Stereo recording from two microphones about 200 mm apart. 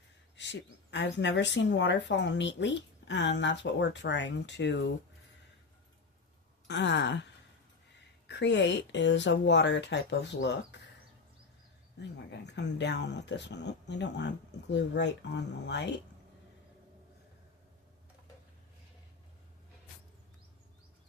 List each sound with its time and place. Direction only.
0.3 s speech: 60° left (ahead or behind)
6.7 s speech: 60° left (ahead or behind)
12.3 s speech: 60° left (ahead or behind)